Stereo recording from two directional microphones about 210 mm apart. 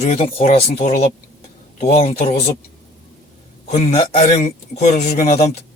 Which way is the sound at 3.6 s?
30° left (ahead or behind).